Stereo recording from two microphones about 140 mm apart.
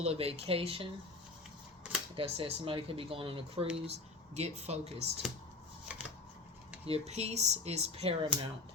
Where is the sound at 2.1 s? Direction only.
40° right (ahead or behind).